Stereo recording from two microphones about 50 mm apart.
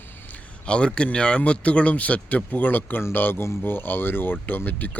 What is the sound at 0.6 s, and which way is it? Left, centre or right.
A man's voice, left.